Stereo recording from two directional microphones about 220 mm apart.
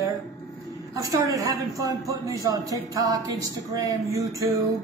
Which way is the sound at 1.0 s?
15° right (ahead or behind).